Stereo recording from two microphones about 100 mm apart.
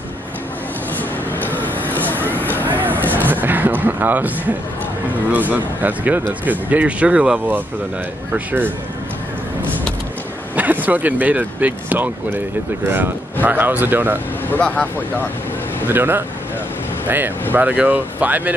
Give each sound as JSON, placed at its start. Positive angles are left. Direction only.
{"t": 1.4, "sound": "vehicle", "side_deg": 15}
{"t": 2.6, "sound": "music", "side_deg": -20}
{"t": 5.3, "sound": "speech", "side_deg": -15}
{"t": 10.5, "sound": "speech", "side_deg": -15}
{"t": 14.5, "sound": "speech", "side_deg": 10}
{"t": 15.9, "sound": "speech", "side_deg": -20}